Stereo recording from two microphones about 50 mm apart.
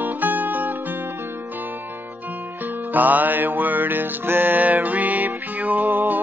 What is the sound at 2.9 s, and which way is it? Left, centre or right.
Music, right.